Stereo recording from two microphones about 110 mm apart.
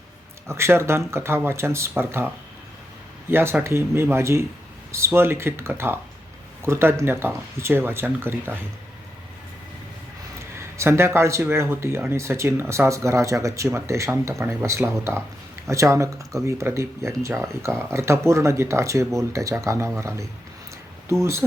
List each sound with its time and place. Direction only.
0.4 s speech: 25° right (ahead or behind)
10.6 s speech: 25° right (ahead or behind)